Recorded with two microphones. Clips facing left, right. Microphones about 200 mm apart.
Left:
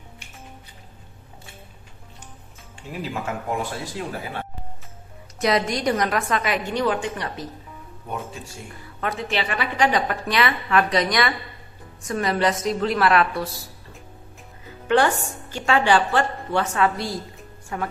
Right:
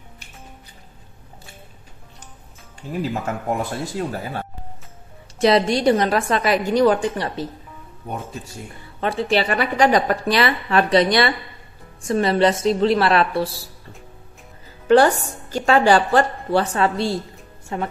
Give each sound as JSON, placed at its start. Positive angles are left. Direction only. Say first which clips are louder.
{"t": 2.9, "sound": "a woman's voice", "louder": "right 4 dB", "side_deg": -40}
{"t": 5.4, "sound": "a woman's voice", "louder": "right 5 dB", "side_deg": -30}
{"t": 9.0, "sound": "a woman's voice", "louder": "right 6 dB", "side_deg": -30}
{"t": 14.9, "sound": "a woman's voice", "louder": "right 5 dB", "side_deg": -40}